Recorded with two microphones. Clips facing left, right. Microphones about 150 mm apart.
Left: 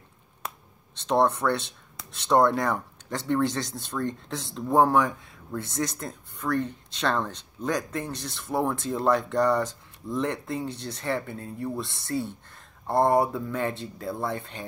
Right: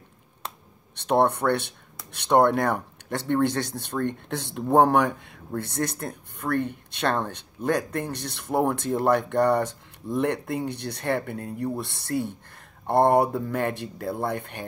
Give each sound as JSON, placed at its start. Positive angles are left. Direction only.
{"t": 0.9, "sound": "speech", "side_deg": -60}